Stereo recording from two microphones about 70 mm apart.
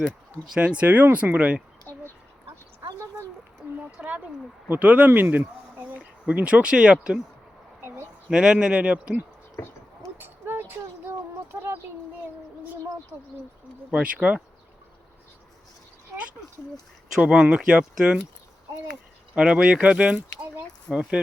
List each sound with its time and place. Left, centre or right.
0.8 s speech: right
1.9 s a sound: right
3.9 s speech: centre
7.8 s a sound: right
8.3 s speech: centre
10.2 s a sound: right
13.9 s speech: centre
17.2 s speech: centre
19.3 s speech: centre